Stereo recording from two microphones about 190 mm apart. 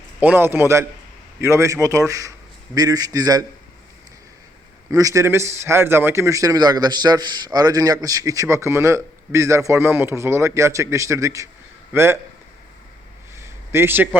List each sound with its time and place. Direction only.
0.2 s a man's voice: 10° right (ahead or behind)
4.9 s a man's voice: 15° right (ahead or behind)
13.3 s a sound: 15° right (ahead or behind)